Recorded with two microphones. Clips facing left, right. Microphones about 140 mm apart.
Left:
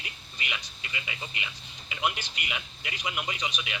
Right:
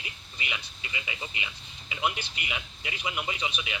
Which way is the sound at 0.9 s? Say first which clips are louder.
Right 1 dB; 25° right (ahead or behind).